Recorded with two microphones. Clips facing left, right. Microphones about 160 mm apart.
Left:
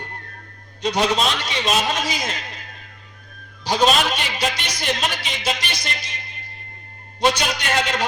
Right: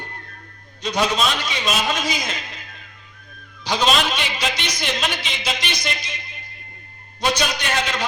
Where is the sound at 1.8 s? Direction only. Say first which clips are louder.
Even; 35° left (ahead or behind).